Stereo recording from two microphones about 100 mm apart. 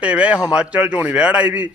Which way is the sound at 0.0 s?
15° right (ahead or behind).